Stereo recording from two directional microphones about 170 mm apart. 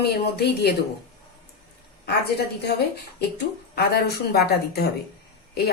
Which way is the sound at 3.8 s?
70° left (ahead or behind).